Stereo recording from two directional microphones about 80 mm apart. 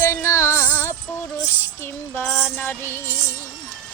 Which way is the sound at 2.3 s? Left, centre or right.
Left.